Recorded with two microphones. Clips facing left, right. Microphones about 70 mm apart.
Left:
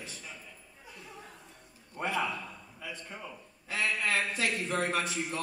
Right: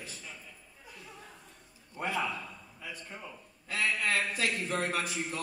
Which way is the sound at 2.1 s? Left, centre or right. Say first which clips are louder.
Left 1 dB; centre.